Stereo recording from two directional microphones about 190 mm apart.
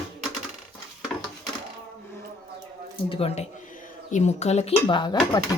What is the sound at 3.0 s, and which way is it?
Speech, 30° left (ahead or behind).